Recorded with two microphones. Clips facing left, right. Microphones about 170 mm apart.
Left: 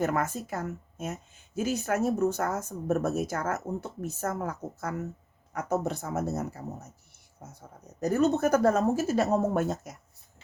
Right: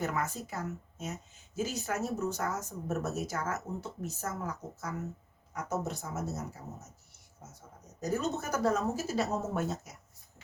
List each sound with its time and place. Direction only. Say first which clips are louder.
0.0 s speech: left 6 dB; 55° left (ahead or behind)
8.0 s speech: left 9 dB; 60° left (ahead or behind)